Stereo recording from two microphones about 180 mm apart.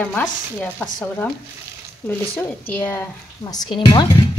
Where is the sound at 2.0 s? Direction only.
10° left (ahead or behind).